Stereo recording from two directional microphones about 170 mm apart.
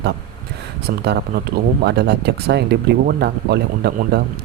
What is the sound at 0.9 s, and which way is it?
Speech, 70° right (ahead or behind).